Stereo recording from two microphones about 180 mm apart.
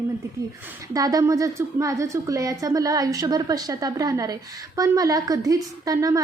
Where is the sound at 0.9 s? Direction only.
20° right (ahead or behind).